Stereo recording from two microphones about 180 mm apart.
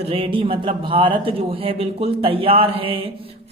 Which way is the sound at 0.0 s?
30° right (ahead or behind).